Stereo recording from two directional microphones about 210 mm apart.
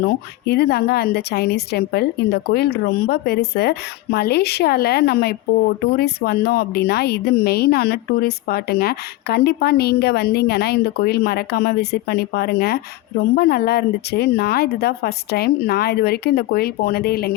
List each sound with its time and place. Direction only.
0.4 s a woman's voice: 50° left (ahead or behind)